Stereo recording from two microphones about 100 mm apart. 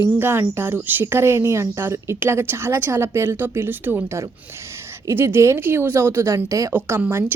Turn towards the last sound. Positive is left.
turn(degrees=-25)  # may be behind; listen again after turning